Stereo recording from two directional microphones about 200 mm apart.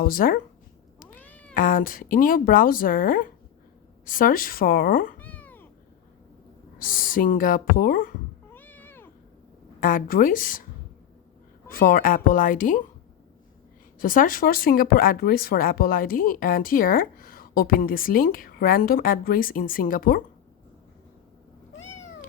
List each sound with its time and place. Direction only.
0.0 s speech: 45° left (ahead or behind)
1.2 s cat: 5° left (ahead or behind)
1.5 s speech: 45° left (ahead or behind)
5.2 s cat: 5° left (ahead or behind)
6.7 s speech: 45° left (ahead or behind)
8.5 s cat: 10° left (ahead or behind)
9.8 s speech: 45° left (ahead or behind)
11.7 s speech: 45° left (ahead or behind)
14.0 s speech: 45° left (ahead or behind)